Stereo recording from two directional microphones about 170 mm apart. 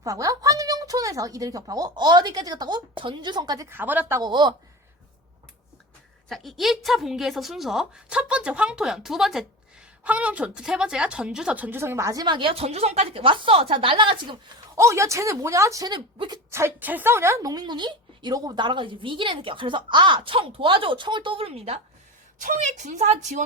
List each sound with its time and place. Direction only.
0.0 s a woman's voice: 20° right (ahead or behind)
4.2 s a woman's voice: 25° right (ahead or behind)
6.2 s a woman's voice: centre (ahead or behind); by 14.3 s 30° right (ahead or behind)
14.8 s a woman's voice: 15° right (ahead or behind)
16.5 s a woman's voice: 15° right (ahead or behind); by 21.8 s 35° right (ahead or behind)
22.4 s a woman's voice: 45° right (ahead or behind)